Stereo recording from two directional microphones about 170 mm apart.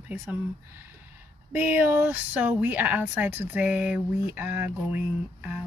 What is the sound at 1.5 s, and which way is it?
Speech, 10° right (ahead or behind).